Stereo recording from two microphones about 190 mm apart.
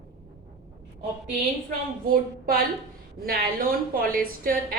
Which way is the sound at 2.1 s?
50° right (ahead or behind).